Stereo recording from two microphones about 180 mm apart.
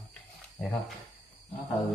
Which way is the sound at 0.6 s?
15° left (ahead or behind).